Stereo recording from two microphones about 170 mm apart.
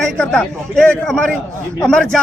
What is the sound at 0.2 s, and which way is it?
A man's voice, 5° left (ahead or behind).